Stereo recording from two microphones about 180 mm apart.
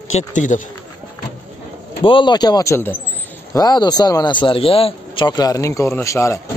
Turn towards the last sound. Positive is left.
turn(degrees=15)  # may be behind; listen again after turning